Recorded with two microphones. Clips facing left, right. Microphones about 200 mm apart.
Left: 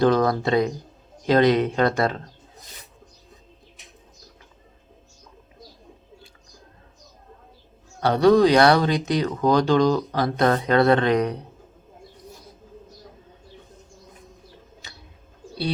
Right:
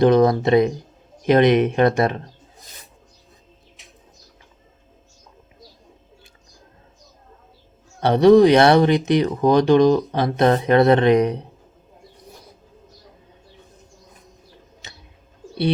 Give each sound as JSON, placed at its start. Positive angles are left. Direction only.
{"t": 0.0, "sound": "speech", "side_deg": -20}
{"t": 8.0, "sound": "speech", "side_deg": -20}
{"t": 14.8, "sound": "pigeon", "side_deg": -20}